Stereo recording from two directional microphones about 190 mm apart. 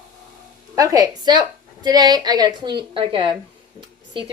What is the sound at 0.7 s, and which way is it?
Speech, 20° right (ahead or behind).